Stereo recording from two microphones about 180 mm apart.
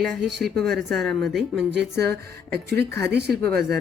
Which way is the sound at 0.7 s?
Centre (ahead or behind).